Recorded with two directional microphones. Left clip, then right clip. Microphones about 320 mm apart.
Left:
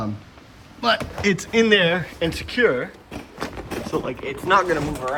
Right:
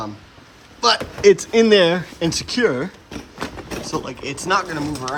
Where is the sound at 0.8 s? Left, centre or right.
Centre.